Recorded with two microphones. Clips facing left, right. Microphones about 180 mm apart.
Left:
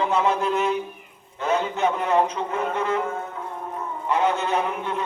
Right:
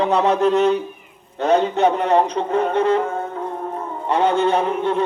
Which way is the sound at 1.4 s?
35° right (ahead or behind).